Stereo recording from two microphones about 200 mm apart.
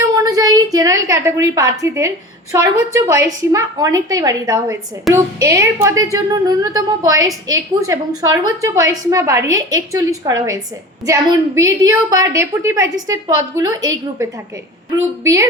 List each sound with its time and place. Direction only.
0.0 s a woman's voice: 20° right (ahead or behind)
15.2 s a woman's voice: 15° right (ahead or behind)